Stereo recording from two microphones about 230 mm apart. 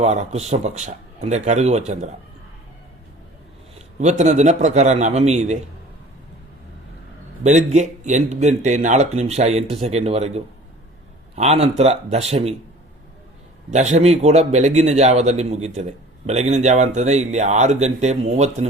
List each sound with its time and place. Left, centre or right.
0.0 s a man's voice: right
3.8 s a man's voice: right
7.4 s a man's voice: right
13.7 s a man's voice: right